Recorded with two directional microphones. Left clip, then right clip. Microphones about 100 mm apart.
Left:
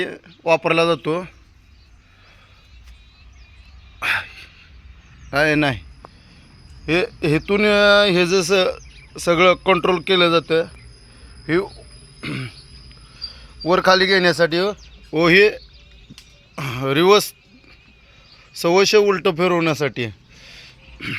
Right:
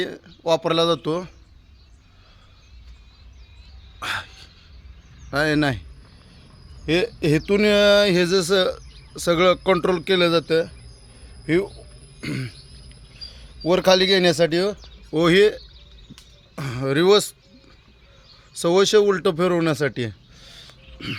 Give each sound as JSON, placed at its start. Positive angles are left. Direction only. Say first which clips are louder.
{"t": 0.0, "sound": "speech", "louder": "left 2 dB", "side_deg": -5}
{"t": 4.0, "sound": "a sound", "louder": "left 7 dB", "side_deg": 0}
{"t": 5.3, "sound": "speech", "louder": "left 3 dB", "side_deg": -5}
{"t": 6.8, "sound": "speech", "louder": "left 1 dB", "side_deg": -20}
{"t": 8.3, "sound": "a man's voice", "louder": "left 2 dB", "side_deg": -5}
{"t": 11.4, "sound": "speech", "louder": "left 1 dB", "side_deg": -25}
{"t": 12.2, "sound": "a sound", "louder": "left 2 dB", "side_deg": -30}
{"t": 13.1, "sound": "cricket", "louder": "left 6 dB", "side_deg": -25}
{"t": 13.7, "sound": "speech", "louder": "left 2 dB", "side_deg": -30}
{"t": 14.6, "sound": "speech", "louder": "left 2 dB", "side_deg": -20}
{"t": 16.6, "sound": "speech", "louder": "left 3 dB", "side_deg": -10}